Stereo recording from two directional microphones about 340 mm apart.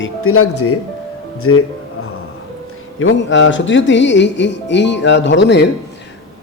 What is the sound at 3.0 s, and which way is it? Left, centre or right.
Speech, left.